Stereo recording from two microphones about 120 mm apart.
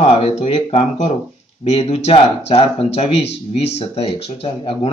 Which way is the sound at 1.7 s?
60° left (ahead or behind).